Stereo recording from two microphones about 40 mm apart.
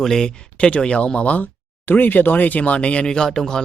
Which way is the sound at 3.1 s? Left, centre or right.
Centre.